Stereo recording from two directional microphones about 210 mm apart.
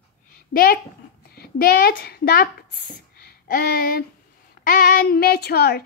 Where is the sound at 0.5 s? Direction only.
45° left (ahead or behind).